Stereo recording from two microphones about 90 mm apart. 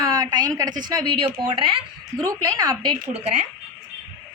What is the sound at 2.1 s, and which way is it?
Speech, 40° right (ahead or behind).